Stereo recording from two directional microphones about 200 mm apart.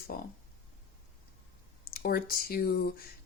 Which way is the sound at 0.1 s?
45° left (ahead or behind).